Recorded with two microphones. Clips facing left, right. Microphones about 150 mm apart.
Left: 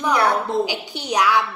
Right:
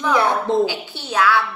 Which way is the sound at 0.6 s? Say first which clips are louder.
Right 3 dB; 15° left (ahead or behind).